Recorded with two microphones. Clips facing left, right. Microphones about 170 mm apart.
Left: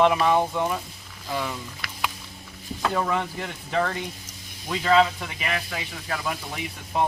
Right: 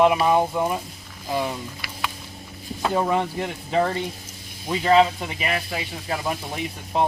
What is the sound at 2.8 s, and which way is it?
Speech, 25° right (ahead or behind).